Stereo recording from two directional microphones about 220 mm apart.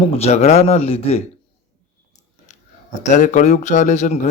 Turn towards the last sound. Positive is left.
turn(degrees=35)  # may be behind; listen again after turning